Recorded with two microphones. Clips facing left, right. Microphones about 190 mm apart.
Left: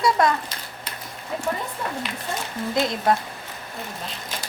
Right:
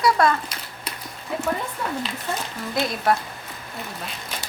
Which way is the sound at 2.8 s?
20° left (ahead or behind).